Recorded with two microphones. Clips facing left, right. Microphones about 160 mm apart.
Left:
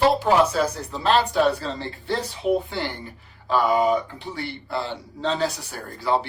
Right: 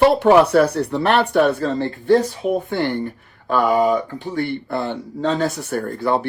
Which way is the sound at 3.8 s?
40° right (ahead or behind).